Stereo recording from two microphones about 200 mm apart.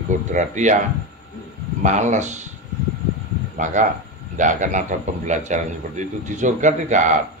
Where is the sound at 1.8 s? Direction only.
35° right (ahead or behind).